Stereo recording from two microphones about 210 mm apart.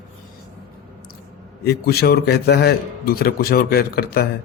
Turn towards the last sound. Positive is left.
turn(degrees=45)  # may be behind; listen again after turning